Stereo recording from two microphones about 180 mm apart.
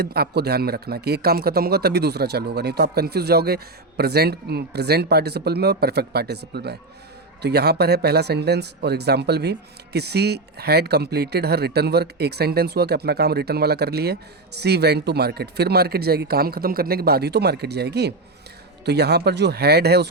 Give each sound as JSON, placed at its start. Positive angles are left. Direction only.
{"t": 0.0, "sound": "a man's voice", "side_deg": -60}